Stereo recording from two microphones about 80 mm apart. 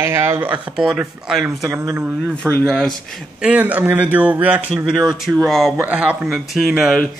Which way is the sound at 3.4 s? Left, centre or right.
Centre.